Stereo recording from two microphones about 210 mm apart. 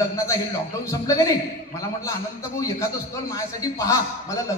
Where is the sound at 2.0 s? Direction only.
15° left (ahead or behind).